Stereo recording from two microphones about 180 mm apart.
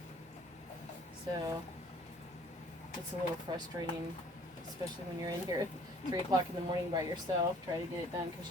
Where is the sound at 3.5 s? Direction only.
25° right (ahead or behind).